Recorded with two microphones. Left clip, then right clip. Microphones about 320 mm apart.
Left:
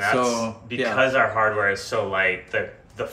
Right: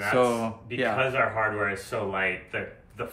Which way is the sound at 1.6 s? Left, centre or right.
Centre.